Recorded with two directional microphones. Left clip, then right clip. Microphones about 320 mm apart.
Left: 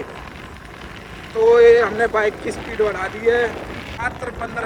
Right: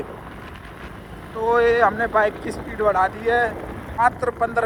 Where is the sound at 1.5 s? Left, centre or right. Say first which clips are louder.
Left 5 dB; centre.